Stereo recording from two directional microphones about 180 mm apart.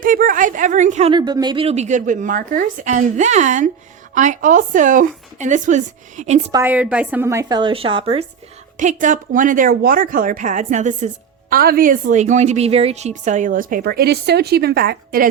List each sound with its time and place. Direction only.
0.0 s speech: 50° right (ahead or behind)
1.1 s a woman's voice: 25° right (ahead or behind); by 6.4 s 40° right (ahead or behind)
6.5 s a woman's voice: 10° right (ahead or behind); by 8.2 s 30° right (ahead or behind)
8.8 s a woman's voice: 45° right (ahead or behind)